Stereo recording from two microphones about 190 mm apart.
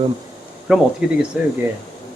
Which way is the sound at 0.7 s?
5° right (ahead or behind).